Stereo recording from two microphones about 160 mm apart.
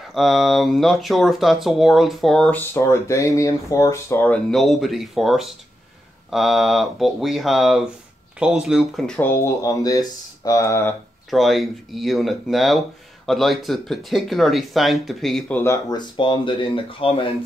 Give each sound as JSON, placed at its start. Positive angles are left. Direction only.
{"t": 0.1, "sound": "speech", "side_deg": 0}
{"t": 2.7, "sound": "speech", "side_deg": 20}
{"t": 11.2, "sound": "speech", "side_deg": 0}
{"t": 16.2, "sound": "speech", "side_deg": 30}